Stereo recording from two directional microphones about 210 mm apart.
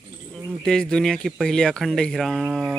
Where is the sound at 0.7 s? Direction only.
5° left (ahead or behind).